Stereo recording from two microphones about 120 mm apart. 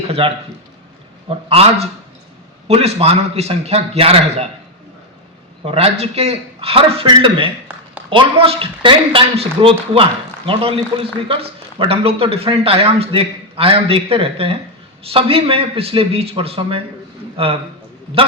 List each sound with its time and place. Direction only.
0.2 s a man's voice: 50° right (ahead or behind)
5.6 s a man's voice: 55° right (ahead or behind)